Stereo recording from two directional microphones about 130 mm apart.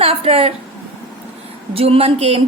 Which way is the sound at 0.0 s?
50° right (ahead or behind).